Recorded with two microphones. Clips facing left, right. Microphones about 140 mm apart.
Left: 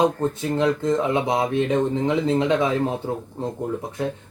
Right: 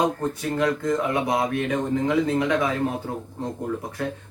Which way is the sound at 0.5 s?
25° left (ahead or behind).